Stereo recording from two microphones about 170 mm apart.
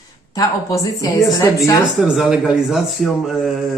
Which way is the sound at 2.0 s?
Centre (ahead or behind).